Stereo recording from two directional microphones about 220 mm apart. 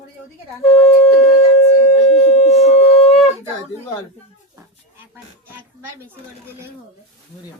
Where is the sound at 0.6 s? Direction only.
30° left (ahead or behind).